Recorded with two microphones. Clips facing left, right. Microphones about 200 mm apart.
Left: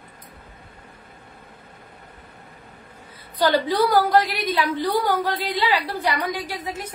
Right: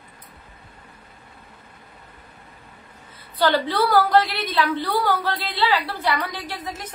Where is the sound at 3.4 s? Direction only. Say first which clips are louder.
Left 1 dB; 15° left (ahead or behind).